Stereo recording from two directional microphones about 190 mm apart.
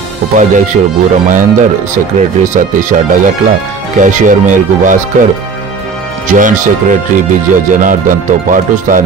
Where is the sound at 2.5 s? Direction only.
40° right (ahead or behind).